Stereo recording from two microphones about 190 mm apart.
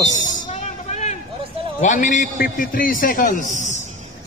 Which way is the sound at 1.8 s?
40° left (ahead or behind).